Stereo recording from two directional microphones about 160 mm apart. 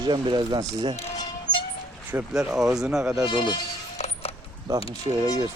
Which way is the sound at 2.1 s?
5° right (ahead or behind).